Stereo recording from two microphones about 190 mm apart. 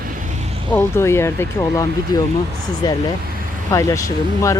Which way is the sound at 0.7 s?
10° left (ahead or behind).